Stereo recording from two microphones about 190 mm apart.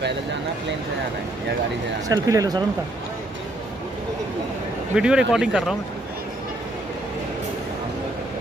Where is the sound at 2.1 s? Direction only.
20° right (ahead or behind).